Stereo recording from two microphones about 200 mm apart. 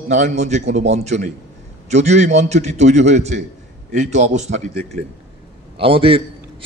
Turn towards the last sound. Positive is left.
turn(degrees=-25)  # may be behind; listen again after turning